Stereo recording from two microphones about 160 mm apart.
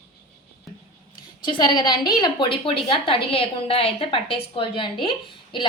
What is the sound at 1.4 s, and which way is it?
A woman's voice, 30° left (ahead or behind).